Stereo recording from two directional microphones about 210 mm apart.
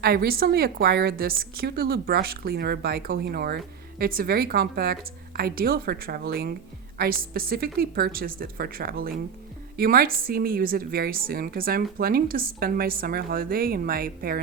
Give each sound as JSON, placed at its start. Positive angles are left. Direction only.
{"t": 0.0, "sound": "a woman's voice", "side_deg": -45}